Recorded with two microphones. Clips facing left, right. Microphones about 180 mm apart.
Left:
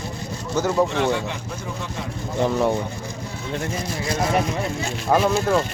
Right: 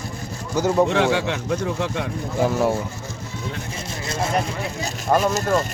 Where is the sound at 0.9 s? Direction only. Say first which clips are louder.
Right 3 dB; 80° right.